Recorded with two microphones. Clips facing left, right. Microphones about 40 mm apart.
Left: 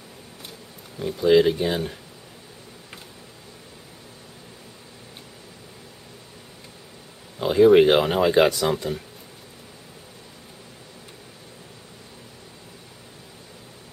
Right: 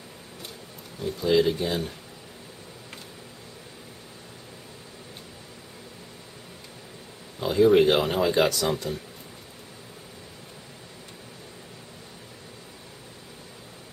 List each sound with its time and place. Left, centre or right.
0.9 s speech: centre
7.3 s speech: centre